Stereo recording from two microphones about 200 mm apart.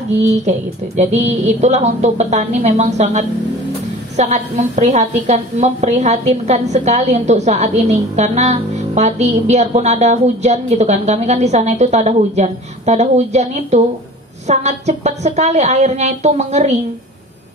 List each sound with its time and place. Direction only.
0.2 s a woman's voice: 35° right (ahead or behind)